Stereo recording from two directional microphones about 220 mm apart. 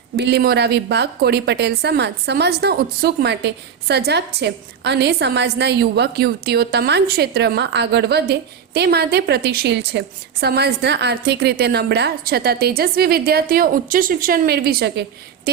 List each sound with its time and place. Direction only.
0.2 s a woman's voice: 50° right (ahead or behind)